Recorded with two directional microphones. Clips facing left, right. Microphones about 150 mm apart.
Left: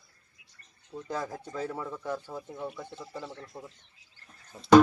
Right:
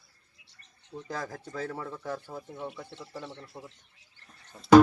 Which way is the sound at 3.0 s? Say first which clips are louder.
Left 1 dB; 20° right (ahead or behind).